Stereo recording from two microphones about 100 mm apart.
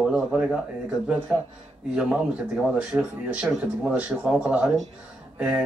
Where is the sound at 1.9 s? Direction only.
10° right (ahead or behind).